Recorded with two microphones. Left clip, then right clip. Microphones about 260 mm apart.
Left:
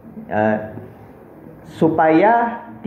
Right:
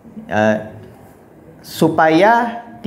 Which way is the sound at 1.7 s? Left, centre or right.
Right.